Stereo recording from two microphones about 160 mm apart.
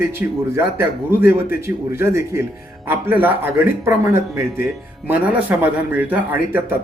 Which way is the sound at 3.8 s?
15° right (ahead or behind).